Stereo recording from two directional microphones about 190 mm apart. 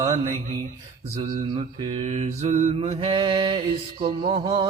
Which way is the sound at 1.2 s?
25° right (ahead or behind).